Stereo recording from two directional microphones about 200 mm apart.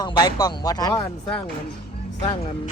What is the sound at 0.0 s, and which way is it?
Speech, 20° left (ahead or behind).